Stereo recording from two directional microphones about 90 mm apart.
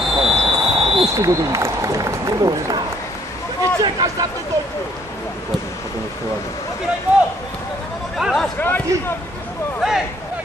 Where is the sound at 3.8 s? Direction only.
50° right (ahead or behind).